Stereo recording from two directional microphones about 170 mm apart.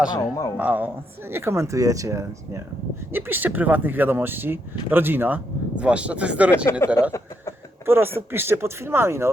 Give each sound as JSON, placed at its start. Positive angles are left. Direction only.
{"t": 0.1, "sound": "speech", "side_deg": 20}
{"t": 0.5, "sound": "speech", "side_deg": -10}
{"t": 6.7, "sound": "speech", "side_deg": 15}
{"t": 7.9, "sound": "speech", "side_deg": -15}